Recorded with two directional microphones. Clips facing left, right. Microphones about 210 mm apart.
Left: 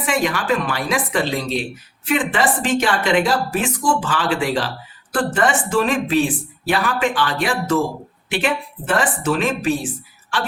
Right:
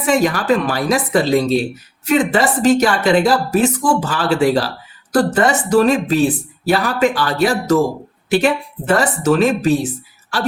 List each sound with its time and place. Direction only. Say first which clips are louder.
0.0 s speech: right 5 dB; 40° right (ahead or behind)
9.0 s speech: right 5 dB; 40° right (ahead or behind)